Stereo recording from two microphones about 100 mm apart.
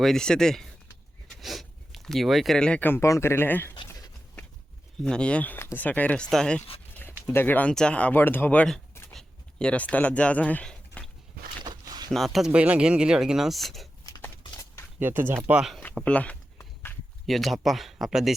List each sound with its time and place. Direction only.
0.0 s speech: 5° left (ahead or behind); by 3.8 s 20° left (ahead or behind)
5.0 s speech: 10° left (ahead or behind)
7.3 s speech: 15° left (ahead or behind)
9.1 s a sound: 10° left (ahead or behind)
11.6 s a sound: 45° right (ahead or behind)
12.1 s speech: centre (ahead or behind)
12.5 s speech: 15° right (ahead or behind)
14.5 s a sound: 30° left (ahead or behind)
14.9 s speech: 20° right (ahead or behind)
15.4 s speech: 10° right (ahead or behind)
16.0 s speech: 15° left (ahead or behind)
16.6 s walk: 20° left (ahead or behind)
17.2 s speech: centre (ahead or behind)